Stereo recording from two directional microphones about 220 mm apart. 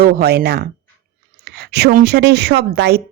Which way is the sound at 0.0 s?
45° right (ahead or behind).